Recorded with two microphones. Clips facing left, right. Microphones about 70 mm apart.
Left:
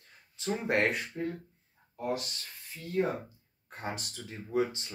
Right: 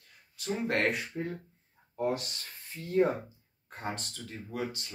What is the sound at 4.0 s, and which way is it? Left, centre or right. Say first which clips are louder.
Speech: even; centre.